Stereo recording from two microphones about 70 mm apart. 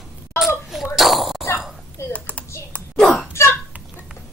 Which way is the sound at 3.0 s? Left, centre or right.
Centre.